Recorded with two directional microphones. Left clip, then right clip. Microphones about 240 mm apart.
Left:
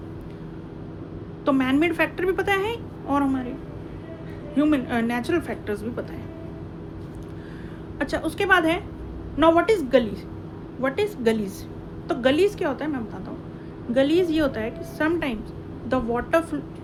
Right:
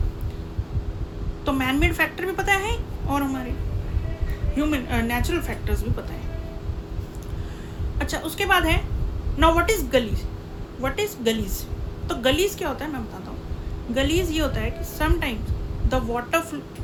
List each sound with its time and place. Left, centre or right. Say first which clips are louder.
1.5 s a woman's voice: left 2 dB; centre
4.5 s a woman's voice: left 3 dB; centre
7.9 s a woman's voice: left 1 dB; centre